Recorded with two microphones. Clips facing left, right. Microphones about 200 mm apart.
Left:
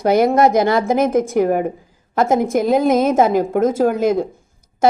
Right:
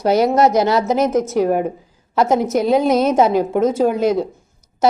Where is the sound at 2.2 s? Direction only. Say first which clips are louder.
Even; 50° left (ahead or behind).